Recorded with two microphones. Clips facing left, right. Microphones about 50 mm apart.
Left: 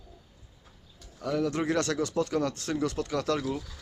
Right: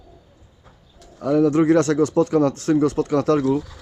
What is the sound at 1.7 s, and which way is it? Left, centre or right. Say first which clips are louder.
Speech: right 11 dB; right.